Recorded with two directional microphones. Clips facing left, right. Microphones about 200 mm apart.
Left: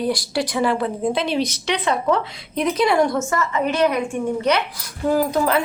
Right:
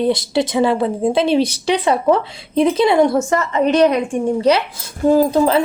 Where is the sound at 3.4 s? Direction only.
35° right (ahead or behind).